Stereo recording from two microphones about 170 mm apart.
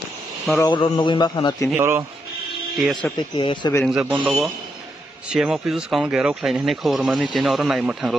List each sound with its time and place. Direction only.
0.7 s a man's voice: 25° left (ahead or behind)
1.8 s a man's voice: 15° right (ahead or behind)
2.7 s speech: centre (ahead or behind)
3.2 s a man's voice: 25° left (ahead or behind)
4.0 s a man's voice: 10° right (ahead or behind)